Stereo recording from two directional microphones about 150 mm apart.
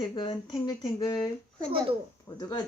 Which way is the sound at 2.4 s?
25° left (ahead or behind).